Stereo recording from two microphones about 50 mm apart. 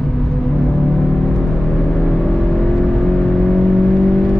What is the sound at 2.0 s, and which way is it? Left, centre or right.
Vehicle, centre.